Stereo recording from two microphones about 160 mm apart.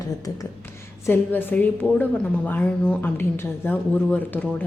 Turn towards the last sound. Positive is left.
turn(degrees=10)  # may be behind; listen again after turning